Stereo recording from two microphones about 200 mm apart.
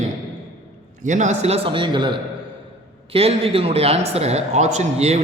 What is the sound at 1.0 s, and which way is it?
A man's voice, 35° right (ahead or behind).